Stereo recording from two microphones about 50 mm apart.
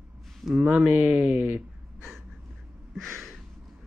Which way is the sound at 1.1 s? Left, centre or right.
Right.